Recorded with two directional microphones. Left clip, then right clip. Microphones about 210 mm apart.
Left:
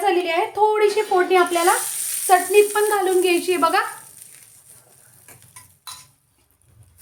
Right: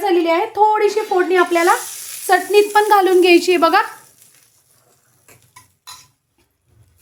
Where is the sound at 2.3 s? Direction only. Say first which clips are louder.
Right 2 dB; 45° right (ahead or behind).